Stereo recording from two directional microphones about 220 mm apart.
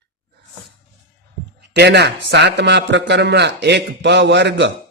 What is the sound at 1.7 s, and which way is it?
Mantra, 50° right (ahead or behind).